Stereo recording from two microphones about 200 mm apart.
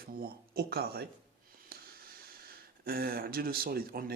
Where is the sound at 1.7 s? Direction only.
50° right (ahead or behind).